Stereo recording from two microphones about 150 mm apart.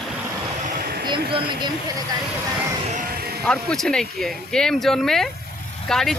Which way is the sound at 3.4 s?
5° left (ahead or behind).